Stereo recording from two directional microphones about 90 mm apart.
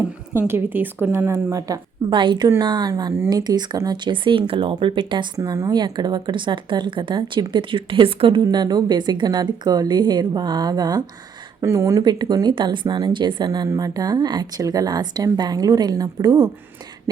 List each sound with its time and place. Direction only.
0.4 s a woman's voice: 25° right (ahead or behind)
1.3 s speech: 35° right (ahead or behind)
2.0 s speech: 65° right (ahead or behind)
3.9 s speech: 60° right (ahead or behind); by 8.4 s 80° right
8.4 s speech: 50° right (ahead or behind)
11.6 s speech: 35° right (ahead or behind)
12.0 s speech: 50° right (ahead or behind)
13.7 s speech: 45° right (ahead or behind)